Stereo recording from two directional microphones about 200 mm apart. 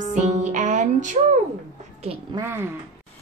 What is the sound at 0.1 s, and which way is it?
Music, 40° right (ahead or behind).